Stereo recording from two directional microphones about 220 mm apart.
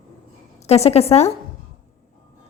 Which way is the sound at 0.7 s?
30° left (ahead or behind).